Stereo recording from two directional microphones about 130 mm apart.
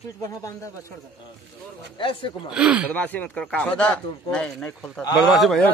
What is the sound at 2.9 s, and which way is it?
Speech, 10° left (ahead or behind).